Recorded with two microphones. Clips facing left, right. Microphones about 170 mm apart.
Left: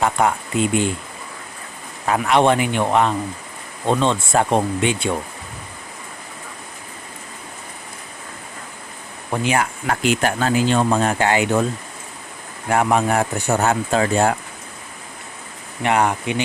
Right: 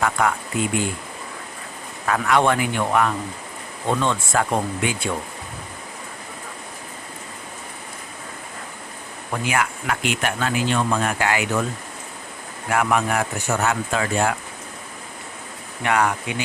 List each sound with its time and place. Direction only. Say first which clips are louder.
0.0 s speech: left 3 dB; 25° left (ahead or behind)
2.0 s speech: left 3 dB; 20° left (ahead or behind)
9.3 s speech: left 3 dB; 25° left (ahead or behind)
12.7 s speech: left 3 dB; 30° left (ahead or behind)
15.8 s speech: left 3 dB; 25° left (ahead or behind)